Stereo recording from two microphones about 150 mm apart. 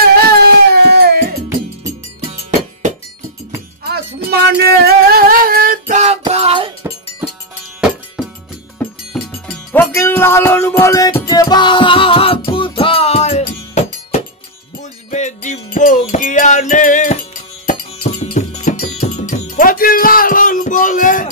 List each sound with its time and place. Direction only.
0.1 s a sound: 90° right
2.2 s music: 45° right (ahead or behind)
3.8 s music: 90° right
5.9 s music: 45° right (ahead or behind)
9.1 s music: centre (ahead or behind)
9.7 s music: 15° left (ahead or behind); by 13.4 s 45° left (ahead or behind)
14.8 s music: 50° left (ahead or behind)
18.0 s music: 50° left (ahead or behind)
18.5 s music: 60° left (ahead or behind)
19.1 s music: 55° left (ahead or behind)